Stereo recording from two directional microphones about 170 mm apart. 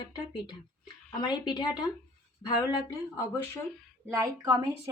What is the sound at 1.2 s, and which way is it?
Speech, 25° left (ahead or behind).